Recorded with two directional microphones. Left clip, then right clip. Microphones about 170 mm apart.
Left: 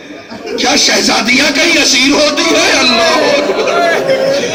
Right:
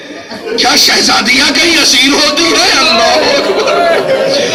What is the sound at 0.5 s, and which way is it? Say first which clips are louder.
A man's voice: right 2 dB; 30° right (ahead or behind).